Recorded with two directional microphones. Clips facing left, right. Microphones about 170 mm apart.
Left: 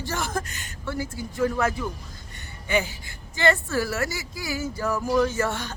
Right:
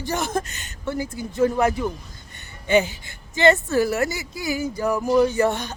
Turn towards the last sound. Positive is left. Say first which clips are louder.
# right 5 dB
turn(degrees=-15)  # may be behind; listen again after turning